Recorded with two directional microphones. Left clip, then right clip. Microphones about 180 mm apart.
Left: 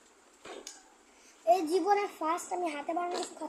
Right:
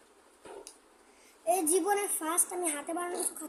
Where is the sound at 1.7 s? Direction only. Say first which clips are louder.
Left 1 dB; 20° right (ahead or behind).